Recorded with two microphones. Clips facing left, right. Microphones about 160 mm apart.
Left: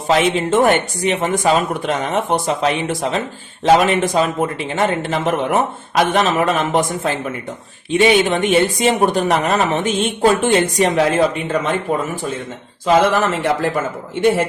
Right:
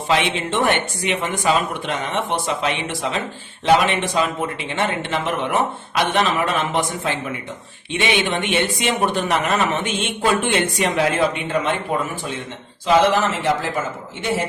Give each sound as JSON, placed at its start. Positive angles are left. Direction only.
{"t": 0.1, "sound": "a man's voice", "side_deg": 40}
{"t": 12.8, "sound": "a man's voice", "side_deg": 50}